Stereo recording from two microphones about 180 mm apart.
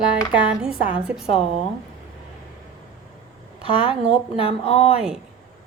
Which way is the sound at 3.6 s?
30° left (ahead or behind).